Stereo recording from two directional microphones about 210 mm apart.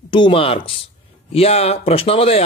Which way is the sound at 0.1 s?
25° left (ahead or behind).